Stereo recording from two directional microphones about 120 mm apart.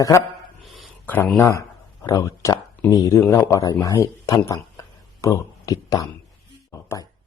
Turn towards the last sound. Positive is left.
turn(degrees=30)  # may be behind; listen again after turning